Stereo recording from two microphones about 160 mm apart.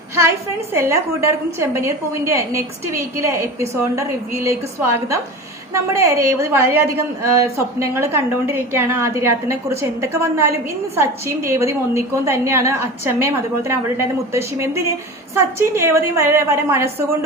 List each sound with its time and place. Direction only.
0.7 s a woman's voice: 15° right (ahead or behind)